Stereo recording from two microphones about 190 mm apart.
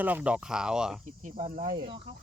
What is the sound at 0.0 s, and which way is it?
Speech, 10° right (ahead or behind).